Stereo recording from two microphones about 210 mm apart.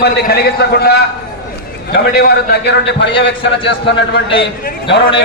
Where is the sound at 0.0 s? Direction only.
50° left (ahead or behind).